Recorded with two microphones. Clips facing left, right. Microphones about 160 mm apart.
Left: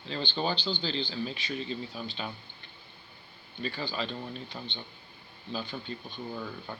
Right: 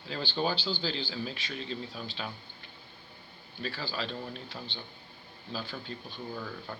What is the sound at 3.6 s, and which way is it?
Speech, centre (ahead or behind).